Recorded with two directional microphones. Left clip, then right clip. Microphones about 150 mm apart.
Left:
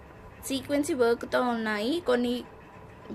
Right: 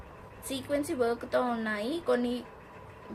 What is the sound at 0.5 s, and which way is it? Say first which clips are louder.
A woman's voice: left 3 dB; 40° left (ahead or behind).